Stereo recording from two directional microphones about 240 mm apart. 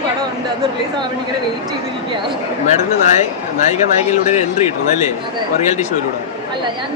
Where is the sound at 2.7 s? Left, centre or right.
Left.